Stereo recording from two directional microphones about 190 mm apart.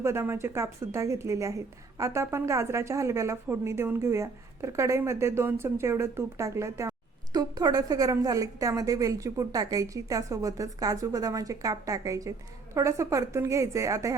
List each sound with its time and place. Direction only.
0.0 s a woman's voice: 15° right (ahead or behind)